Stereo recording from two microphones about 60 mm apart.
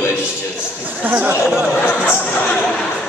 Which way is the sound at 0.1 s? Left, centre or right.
Centre.